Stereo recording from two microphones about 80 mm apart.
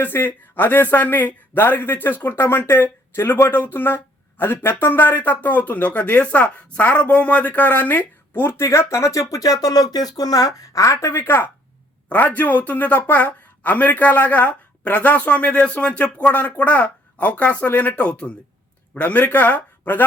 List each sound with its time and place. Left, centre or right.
0.0 s speech: left
11.1 s speech: left